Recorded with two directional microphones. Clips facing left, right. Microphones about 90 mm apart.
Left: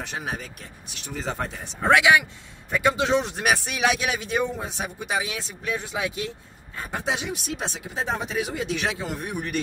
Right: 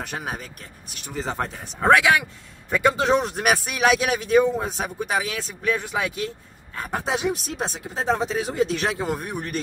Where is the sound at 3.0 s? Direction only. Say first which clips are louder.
Right 2 dB; 45° right (ahead or behind).